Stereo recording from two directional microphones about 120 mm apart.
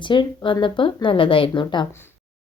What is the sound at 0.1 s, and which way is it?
Speech, 45° left (ahead or behind).